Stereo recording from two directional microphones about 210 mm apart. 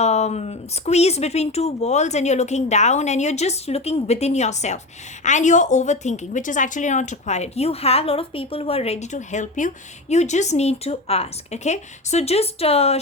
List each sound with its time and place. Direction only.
0.0 s a woman's voice: 30° left (ahead or behind)